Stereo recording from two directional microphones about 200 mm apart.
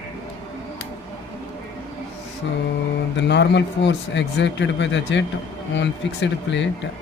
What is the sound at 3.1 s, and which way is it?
A man's voice, 60° left (ahead or behind).